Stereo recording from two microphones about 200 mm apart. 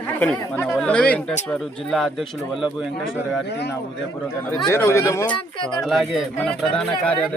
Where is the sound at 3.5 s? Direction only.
55° left (ahead or behind).